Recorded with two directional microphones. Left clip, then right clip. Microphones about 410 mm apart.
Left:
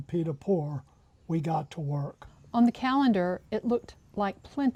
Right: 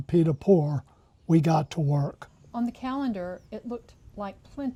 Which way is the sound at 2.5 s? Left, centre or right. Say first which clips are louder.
Left 6 dB; left.